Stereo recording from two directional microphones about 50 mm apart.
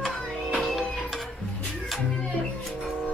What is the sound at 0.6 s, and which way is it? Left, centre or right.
Music, centre.